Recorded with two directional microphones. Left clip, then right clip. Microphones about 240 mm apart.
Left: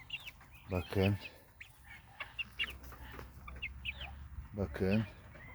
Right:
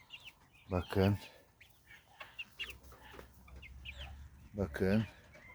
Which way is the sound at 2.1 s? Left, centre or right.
Centre.